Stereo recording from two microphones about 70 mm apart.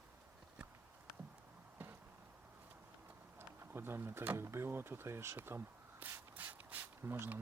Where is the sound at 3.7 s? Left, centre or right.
Right.